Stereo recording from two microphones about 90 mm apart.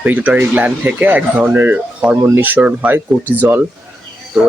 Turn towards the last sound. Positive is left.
turn(degrees=-5)  # may be behind; listen again after turning